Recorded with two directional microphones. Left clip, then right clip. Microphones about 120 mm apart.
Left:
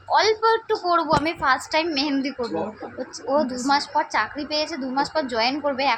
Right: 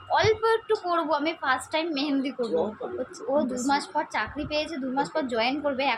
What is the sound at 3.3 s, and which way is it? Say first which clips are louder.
A woman's voice: left 4 dB; 10° left (ahead or behind).